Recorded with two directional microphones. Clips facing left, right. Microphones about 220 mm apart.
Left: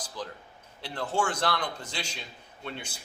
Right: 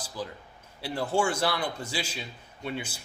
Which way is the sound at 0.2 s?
10° right (ahead or behind).